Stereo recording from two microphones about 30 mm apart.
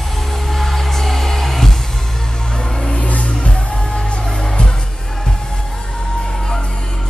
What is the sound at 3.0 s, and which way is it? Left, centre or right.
Music, left.